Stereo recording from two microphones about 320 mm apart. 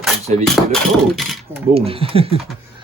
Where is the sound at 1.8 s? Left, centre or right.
Centre.